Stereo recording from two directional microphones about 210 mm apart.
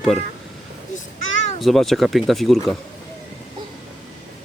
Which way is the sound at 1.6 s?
Centre (ahead or behind).